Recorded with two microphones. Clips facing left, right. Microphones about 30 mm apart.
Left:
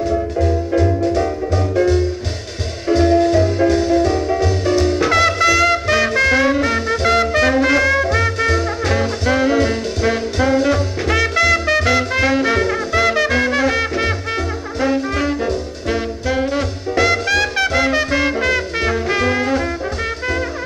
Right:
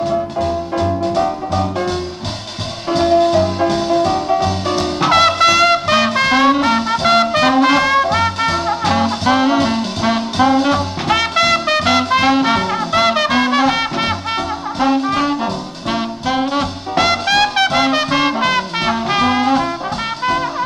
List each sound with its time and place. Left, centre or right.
0.1 s music: right
2.9 s music: right
14.8 s brass instrument: right